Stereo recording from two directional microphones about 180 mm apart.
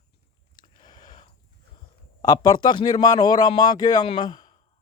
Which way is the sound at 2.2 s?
20° left (ahead or behind).